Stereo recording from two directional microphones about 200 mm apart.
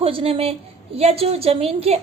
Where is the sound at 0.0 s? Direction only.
30° right (ahead or behind).